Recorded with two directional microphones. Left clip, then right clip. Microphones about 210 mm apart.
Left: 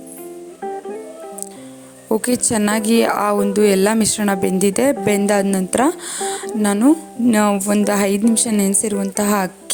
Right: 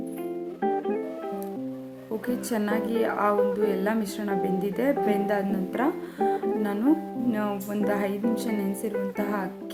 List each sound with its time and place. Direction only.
0.6 s music: centre (ahead or behind)
2.2 s speech: 45° left (ahead or behind)